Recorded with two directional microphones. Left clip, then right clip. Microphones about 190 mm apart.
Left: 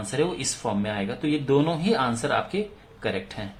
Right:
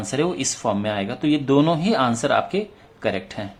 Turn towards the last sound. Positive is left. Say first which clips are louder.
# right 4 dB
turn(degrees=-25)  # may be behind; listen again after turning